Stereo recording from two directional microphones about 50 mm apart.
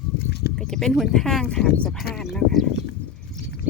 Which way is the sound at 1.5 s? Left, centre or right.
Left.